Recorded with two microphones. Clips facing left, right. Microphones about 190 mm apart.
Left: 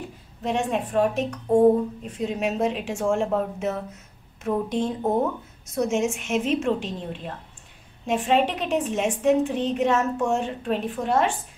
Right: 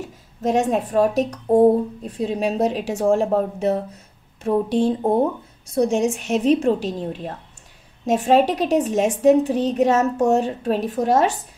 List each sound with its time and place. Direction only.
0.0 s a woman's voice: 40° right (ahead or behind)